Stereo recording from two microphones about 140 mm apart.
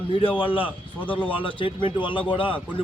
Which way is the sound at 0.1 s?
40° left (ahead or behind).